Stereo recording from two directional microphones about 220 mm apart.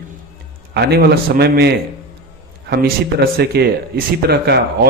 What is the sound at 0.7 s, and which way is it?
A man's voice, 50° right (ahead or behind).